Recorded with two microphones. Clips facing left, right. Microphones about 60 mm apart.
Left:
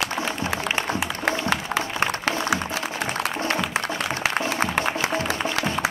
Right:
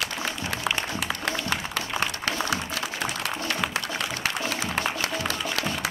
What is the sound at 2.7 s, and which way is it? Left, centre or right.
Music, left.